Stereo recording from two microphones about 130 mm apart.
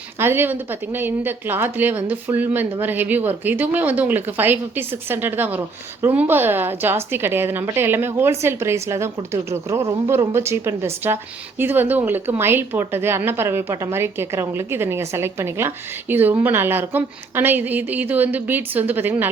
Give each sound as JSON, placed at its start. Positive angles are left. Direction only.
{"t": 0.2, "sound": "speech", "side_deg": -15}